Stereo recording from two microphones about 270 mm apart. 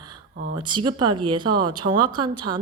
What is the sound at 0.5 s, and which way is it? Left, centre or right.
A woman's voice, centre.